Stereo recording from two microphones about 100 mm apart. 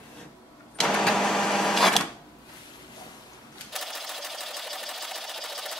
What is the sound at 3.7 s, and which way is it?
Sewing machine, centre (ahead or behind).